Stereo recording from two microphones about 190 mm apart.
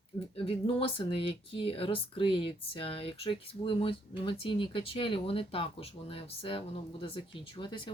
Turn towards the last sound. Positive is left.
turn(degrees=25)  # may be behind; listen again after turning